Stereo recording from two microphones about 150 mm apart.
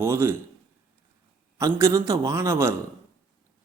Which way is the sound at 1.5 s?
20° right (ahead or behind).